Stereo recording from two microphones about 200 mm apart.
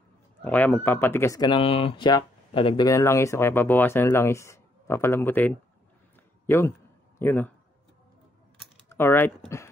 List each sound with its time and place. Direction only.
0.4 s a man's voice: 10° left (ahead or behind)
8.8 s speech: 10° left (ahead or behind)